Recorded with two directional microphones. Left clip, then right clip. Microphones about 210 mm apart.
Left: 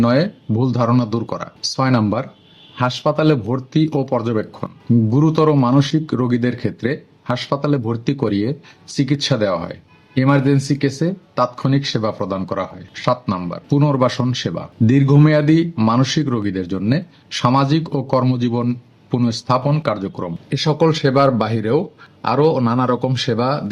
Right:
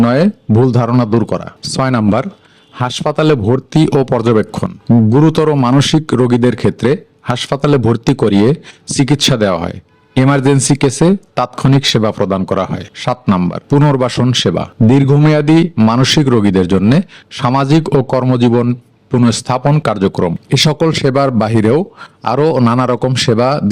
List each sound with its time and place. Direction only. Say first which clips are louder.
0.0 s speech: right 5 dB; 45° right (ahead or behind)